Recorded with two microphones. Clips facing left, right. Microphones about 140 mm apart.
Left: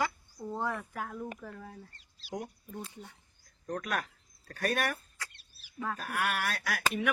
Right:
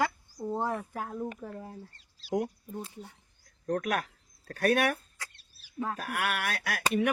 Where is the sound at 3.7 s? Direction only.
55° right (ahead or behind).